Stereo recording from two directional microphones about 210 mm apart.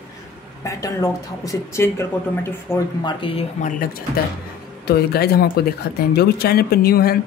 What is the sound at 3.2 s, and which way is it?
Speech, 25° left (ahead or behind).